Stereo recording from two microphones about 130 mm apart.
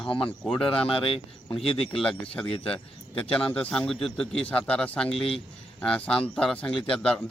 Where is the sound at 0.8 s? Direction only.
45° left (ahead or behind).